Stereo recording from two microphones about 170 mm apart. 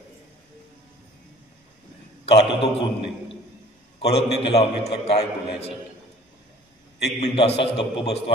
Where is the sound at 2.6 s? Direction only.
30° left (ahead or behind).